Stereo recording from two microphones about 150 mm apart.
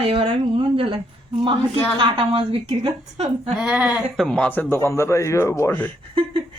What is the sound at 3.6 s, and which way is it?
Speech, 5° right (ahead or behind).